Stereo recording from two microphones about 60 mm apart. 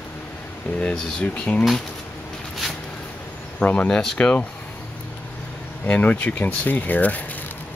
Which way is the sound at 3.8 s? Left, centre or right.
Centre.